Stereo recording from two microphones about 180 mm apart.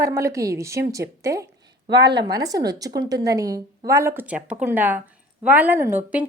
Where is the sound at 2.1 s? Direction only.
20° right (ahead or behind).